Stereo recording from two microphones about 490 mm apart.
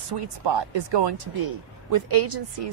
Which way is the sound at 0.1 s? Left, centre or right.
Right.